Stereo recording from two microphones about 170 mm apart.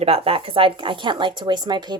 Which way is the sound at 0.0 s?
35° right (ahead or behind).